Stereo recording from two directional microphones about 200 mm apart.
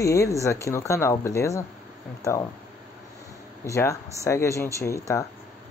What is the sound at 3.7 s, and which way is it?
Speech, 15° left (ahead or behind).